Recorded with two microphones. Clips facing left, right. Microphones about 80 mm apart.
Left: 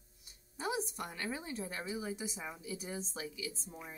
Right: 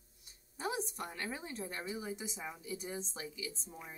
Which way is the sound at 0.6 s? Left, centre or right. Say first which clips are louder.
Left 1 dB; centre.